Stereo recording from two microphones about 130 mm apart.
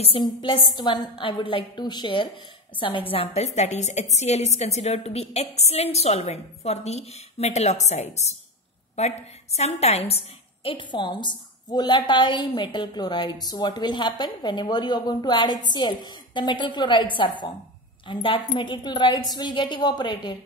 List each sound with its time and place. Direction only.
0.2 s a woman's voice: 35° left (ahead or behind)